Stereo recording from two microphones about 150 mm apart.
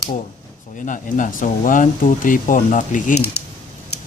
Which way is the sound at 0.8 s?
60° left (ahead or behind).